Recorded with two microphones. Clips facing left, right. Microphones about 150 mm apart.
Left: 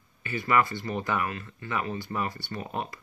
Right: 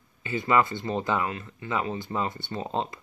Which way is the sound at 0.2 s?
20° right (ahead or behind).